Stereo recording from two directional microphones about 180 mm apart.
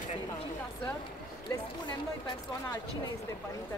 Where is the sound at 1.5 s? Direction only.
20° left (ahead or behind).